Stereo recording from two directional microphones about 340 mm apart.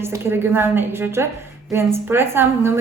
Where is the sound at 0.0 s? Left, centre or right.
Centre.